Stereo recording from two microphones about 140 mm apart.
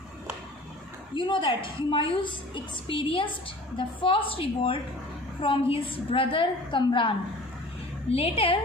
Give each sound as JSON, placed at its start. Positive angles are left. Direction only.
{"t": 1.1, "sound": "a woman's voice", "side_deg": 35}
{"t": 8.1, "sound": "a woman's voice", "side_deg": 45}